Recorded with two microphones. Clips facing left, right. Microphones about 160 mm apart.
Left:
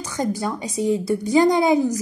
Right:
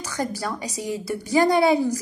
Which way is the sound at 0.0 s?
20° left (ahead or behind).